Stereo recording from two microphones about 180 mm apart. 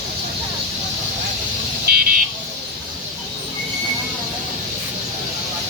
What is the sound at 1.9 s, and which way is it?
Speech, 60° right (ahead or behind).